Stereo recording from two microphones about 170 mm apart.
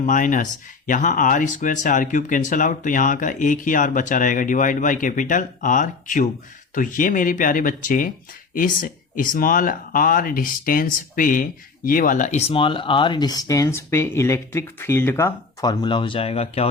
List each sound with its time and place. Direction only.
0.0 s speech: 50° left (ahead or behind)